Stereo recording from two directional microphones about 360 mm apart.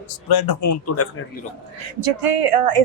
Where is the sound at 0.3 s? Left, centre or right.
Left.